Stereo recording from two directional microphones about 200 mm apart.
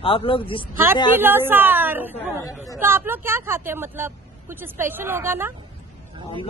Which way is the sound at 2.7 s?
10° right (ahead or behind).